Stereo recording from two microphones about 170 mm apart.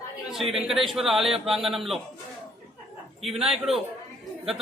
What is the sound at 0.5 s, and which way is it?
A man's voice, centre (ahead or behind).